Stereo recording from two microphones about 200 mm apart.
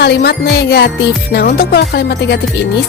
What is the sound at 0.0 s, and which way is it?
Speech, 55° left (ahead or behind).